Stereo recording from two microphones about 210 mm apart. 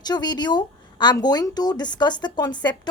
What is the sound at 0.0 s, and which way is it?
A woman's voice, 20° left (ahead or behind).